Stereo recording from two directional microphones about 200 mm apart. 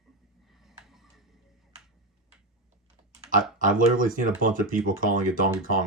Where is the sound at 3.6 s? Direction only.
40° right (ahead or behind).